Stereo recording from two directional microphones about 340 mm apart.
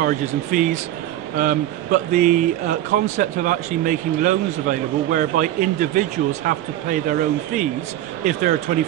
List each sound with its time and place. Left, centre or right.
0.0 s speech: right